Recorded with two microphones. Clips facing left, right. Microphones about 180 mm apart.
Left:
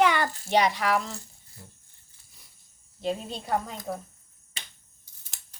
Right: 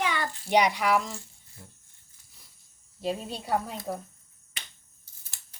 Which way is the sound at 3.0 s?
5° right (ahead or behind).